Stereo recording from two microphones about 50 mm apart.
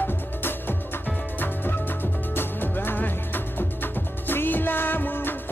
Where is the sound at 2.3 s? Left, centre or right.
Left.